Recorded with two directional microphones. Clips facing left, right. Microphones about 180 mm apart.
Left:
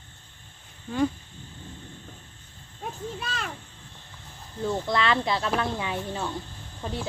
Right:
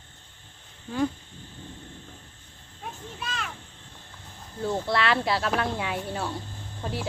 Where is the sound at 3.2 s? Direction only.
40° left (ahead or behind).